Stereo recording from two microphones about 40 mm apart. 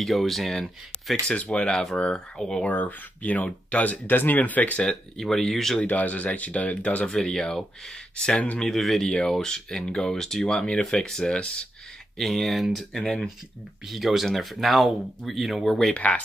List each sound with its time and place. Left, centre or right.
0.0 s speech: centre
1.5 s speech: left
2.6 s speech: left
4.1 s speech: left
4.8 s speech: centre
5.9 s speech: left
7.1 s speech: centre
8.5 s speech: centre
9.0 s speech: centre
11.3 s speech: left
12.2 s speech: centre
13.8 s speech: centre